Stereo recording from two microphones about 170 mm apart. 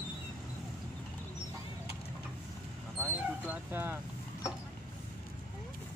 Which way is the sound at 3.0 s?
10° right (ahead or behind).